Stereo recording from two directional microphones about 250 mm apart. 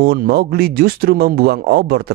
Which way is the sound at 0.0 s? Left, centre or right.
Right.